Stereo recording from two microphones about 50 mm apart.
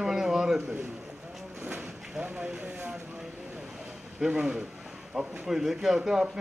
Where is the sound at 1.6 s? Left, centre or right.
Right.